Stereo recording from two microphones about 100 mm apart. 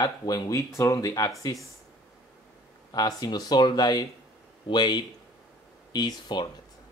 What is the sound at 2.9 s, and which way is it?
Speech, 40° left (ahead or behind).